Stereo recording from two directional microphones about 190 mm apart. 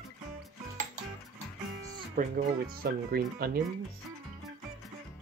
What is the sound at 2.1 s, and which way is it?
Speech, 50° right (ahead or behind).